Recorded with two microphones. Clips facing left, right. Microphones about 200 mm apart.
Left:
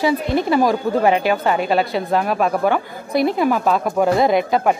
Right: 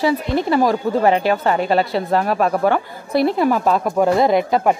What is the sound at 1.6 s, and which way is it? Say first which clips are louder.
Speech: right 1 dB; 30° right (ahead or behind).